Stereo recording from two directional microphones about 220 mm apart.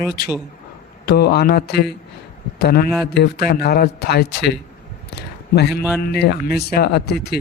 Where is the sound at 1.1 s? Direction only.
45° left (ahead or behind).